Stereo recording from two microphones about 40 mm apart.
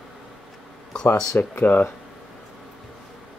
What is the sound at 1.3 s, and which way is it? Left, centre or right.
Speech, left.